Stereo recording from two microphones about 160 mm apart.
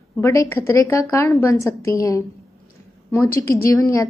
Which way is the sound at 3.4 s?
20° left (ahead or behind).